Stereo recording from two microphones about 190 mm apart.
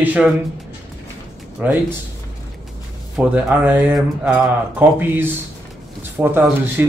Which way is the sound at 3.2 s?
5° right (ahead or behind).